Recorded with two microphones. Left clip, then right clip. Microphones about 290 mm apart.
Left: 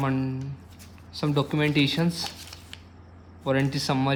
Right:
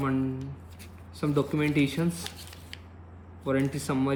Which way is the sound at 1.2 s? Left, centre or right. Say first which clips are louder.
Left 2 dB; left.